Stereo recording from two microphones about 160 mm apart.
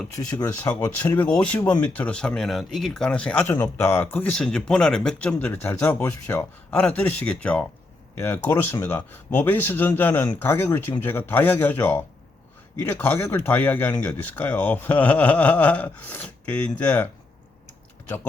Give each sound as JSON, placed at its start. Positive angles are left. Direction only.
{"t": 0.2, "sound": "speech", "side_deg": 25}
{"t": 1.2, "sound": "speech", "side_deg": 5}